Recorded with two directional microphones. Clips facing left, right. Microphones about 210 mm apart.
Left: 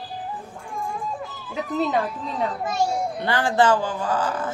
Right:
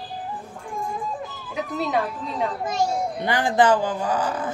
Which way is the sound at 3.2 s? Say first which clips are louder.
Right 1 dB; 15° right (ahead or behind).